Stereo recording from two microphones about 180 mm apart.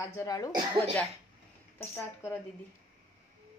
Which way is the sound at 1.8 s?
15° left (ahead or behind).